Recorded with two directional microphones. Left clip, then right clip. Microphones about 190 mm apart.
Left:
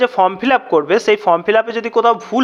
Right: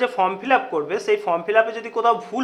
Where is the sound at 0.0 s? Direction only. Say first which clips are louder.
Left 7 dB; 35° left (ahead or behind).